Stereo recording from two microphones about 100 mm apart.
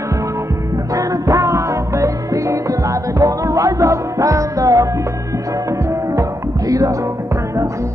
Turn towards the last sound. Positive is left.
turn(degrees=-35)  # may be behind; listen again after turning